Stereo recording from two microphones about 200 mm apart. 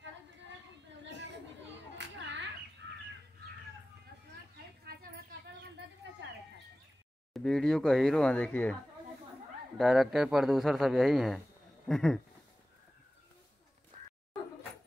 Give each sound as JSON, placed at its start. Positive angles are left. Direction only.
{"t": 2.0, "sound": "a sound", "side_deg": -60}
{"t": 7.3, "sound": "speech", "side_deg": 0}
{"t": 9.8, "sound": "speech", "side_deg": 0}